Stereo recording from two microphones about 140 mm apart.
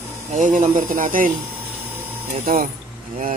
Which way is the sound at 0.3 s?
60° right (ahead or behind).